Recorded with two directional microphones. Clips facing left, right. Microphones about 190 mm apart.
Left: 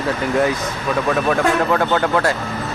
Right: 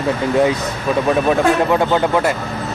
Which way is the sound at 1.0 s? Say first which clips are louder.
Right 3 dB; 15° right (ahead or behind).